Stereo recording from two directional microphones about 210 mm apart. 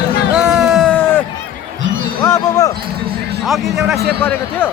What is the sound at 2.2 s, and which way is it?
Basketball bounce, 15° left (ahead or behind).